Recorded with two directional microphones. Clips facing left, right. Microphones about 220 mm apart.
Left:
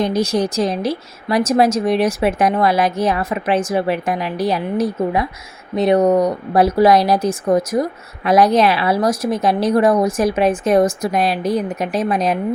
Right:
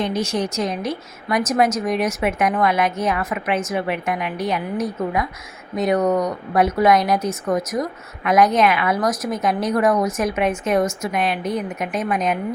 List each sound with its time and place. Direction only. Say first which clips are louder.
0.0 s speech: left 5 dB; 35° left (ahead or behind)